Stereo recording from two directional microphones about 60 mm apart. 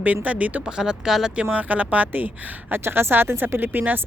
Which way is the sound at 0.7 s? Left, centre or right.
Centre.